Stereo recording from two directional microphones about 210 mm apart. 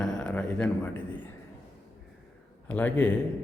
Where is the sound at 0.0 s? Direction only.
5° left (ahead or behind).